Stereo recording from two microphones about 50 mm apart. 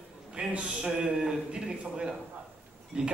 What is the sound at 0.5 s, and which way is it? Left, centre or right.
Speech, right.